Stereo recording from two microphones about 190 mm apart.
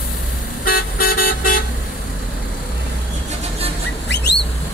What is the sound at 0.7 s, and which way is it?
Vehicle, 50° left (ahead or behind).